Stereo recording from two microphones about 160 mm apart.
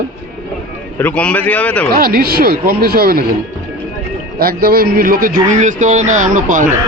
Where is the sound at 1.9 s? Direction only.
70° right (ahead or behind).